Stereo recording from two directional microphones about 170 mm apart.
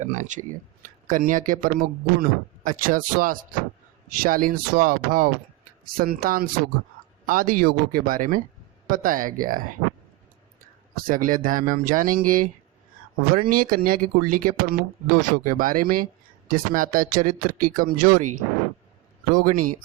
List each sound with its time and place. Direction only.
0.0 s speech: 45° right (ahead or behind)